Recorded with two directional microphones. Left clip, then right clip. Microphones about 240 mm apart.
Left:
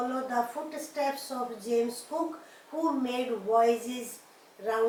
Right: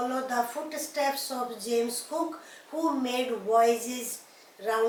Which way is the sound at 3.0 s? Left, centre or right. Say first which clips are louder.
Right 2 dB; centre.